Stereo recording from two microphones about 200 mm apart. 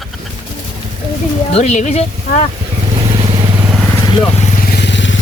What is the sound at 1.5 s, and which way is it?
Speech, 35° left (ahead or behind).